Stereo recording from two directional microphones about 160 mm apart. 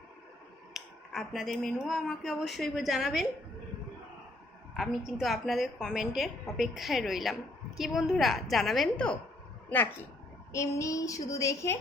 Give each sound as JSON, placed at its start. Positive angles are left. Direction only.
{"t": 0.7, "sound": "speech", "side_deg": 0}
{"t": 4.8, "sound": "speech", "side_deg": 0}
{"t": 10.5, "sound": "female singing", "side_deg": 20}